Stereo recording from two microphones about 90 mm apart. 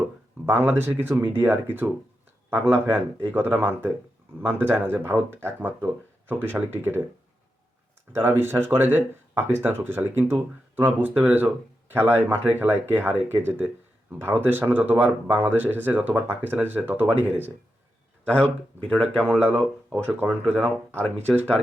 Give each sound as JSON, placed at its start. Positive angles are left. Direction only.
{"t": 0.4, "sound": "speech", "side_deg": -20}
{"t": 8.1, "sound": "speech", "side_deg": -25}
{"t": 18.3, "sound": "speech", "side_deg": 10}
{"t": 19.2, "sound": "speech", "side_deg": -20}